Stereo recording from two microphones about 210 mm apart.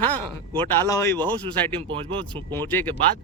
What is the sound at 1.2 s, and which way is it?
Speech, 20° right (ahead or behind).